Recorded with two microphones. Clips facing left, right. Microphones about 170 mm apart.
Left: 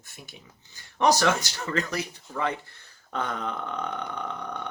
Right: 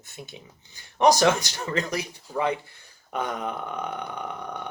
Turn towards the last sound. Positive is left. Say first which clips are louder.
# even
turn(degrees=-10)  # may be behind; listen again after turning